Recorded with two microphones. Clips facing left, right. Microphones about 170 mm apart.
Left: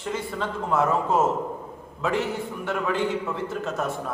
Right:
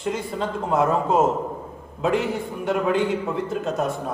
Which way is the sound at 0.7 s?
20° right (ahead or behind).